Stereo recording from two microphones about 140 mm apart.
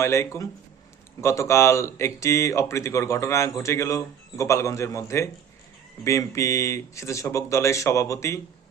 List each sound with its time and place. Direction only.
0.0 s speech: 20° left (ahead or behind)